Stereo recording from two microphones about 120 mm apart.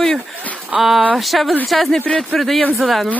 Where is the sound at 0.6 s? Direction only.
Centre (ahead or behind).